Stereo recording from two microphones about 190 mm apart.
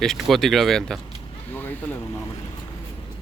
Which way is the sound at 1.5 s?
10° left (ahead or behind).